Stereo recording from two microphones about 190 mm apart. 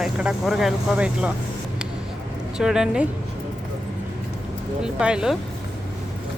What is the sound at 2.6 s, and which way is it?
Speech, 5° right (ahead or behind).